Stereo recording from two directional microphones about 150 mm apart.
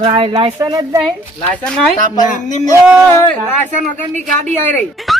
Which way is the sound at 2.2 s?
55° left (ahead or behind).